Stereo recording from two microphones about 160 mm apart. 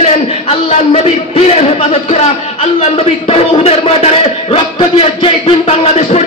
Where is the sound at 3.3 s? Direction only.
40° left (ahead or behind).